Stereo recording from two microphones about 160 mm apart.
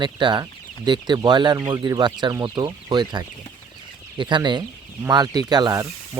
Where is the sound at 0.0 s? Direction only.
30° right (ahead or behind).